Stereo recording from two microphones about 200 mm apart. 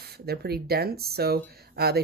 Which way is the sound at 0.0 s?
50° right (ahead or behind).